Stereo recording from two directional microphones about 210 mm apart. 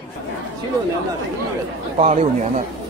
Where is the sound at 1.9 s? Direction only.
30° right (ahead or behind).